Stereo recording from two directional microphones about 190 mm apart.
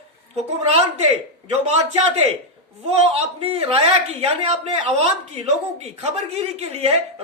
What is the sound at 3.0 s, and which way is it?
Speech, 30° right (ahead or behind).